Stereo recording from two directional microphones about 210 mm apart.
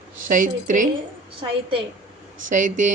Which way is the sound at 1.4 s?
20° right (ahead or behind).